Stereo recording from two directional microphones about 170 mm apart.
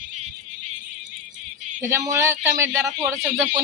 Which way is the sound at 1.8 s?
15° right (ahead or behind).